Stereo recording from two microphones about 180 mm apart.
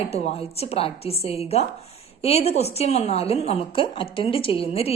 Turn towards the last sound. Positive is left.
turn(degrees=35)  # may be behind; listen again after turning